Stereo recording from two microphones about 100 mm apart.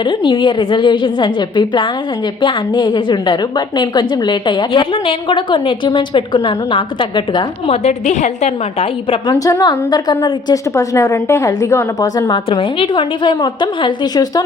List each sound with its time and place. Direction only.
0.0 s a woman's voice: 50° left (ahead or behind)
8.4 s a woman's voice: 90° left
9.3 s a woman's voice: 35° left (ahead or behind)
10.5 s a woman's voice: 30° left (ahead or behind)
12.5 s a woman's voice: 65° left (ahead or behind); by 14.4 s 40° left (ahead or behind)